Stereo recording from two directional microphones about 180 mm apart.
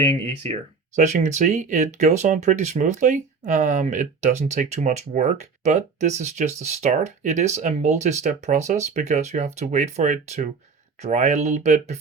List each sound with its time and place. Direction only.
0.9 s speech: 40° right (ahead or behind)